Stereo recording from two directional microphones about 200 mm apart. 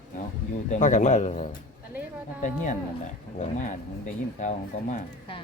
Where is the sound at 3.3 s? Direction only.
35° left (ahead or behind).